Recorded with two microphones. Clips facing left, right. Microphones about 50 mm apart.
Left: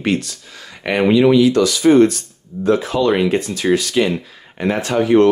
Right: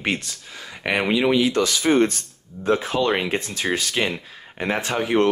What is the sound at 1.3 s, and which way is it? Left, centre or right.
Speech, right.